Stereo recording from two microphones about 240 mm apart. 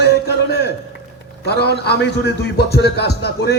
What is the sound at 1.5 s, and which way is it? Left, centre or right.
A man's voice, left.